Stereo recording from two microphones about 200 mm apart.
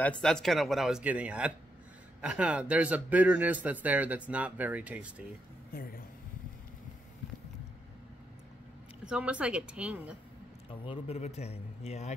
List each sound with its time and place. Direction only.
0.2 s a man's voice: centre (ahead or behind)
5.7 s speech: 45° left (ahead or behind)
9.0 s speech: 5° right (ahead or behind)
10.7 s a man's voice: 25° left (ahead or behind)